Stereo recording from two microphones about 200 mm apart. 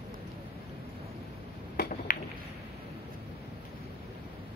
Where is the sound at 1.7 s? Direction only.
45° left (ahead or behind).